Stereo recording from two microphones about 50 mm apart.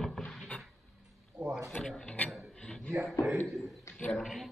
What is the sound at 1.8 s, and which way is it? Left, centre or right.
Mechanisms, centre.